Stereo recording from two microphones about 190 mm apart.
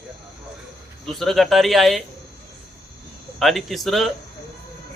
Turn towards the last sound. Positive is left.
turn(degrees=0)  # may be behind; listen again after turning